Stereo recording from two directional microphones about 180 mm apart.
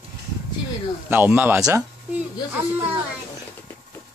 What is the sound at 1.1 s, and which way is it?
Speech, 10° right (ahead or behind).